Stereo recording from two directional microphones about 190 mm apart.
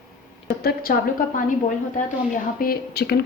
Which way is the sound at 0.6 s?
55° left (ahead or behind).